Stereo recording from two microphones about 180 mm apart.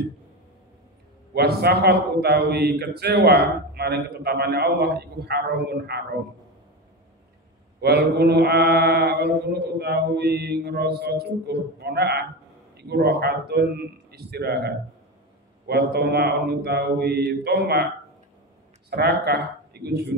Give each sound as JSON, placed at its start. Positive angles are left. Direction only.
{"t": 1.3, "sound": "a man's voice", "side_deg": -65}
{"t": 7.8, "sound": "a man's voice", "side_deg": -65}
{"t": 18.9, "sound": "speech", "side_deg": -60}